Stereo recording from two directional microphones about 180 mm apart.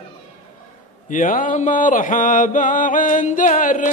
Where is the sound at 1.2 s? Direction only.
45° left (ahead or behind).